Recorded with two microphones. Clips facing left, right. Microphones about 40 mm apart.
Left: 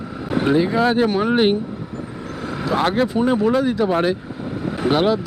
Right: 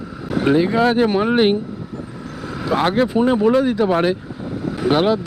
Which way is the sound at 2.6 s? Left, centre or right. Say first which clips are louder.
Right 2 dB; centre.